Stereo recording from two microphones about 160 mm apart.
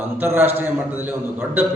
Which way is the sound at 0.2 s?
15° right (ahead or behind).